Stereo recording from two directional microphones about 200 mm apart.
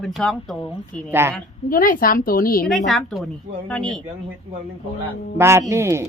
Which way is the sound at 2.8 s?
Centre (ahead or behind).